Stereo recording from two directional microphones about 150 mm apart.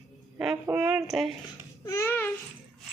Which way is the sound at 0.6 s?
10° right (ahead or behind).